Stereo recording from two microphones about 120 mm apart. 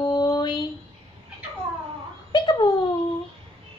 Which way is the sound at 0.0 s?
35° left (ahead or behind).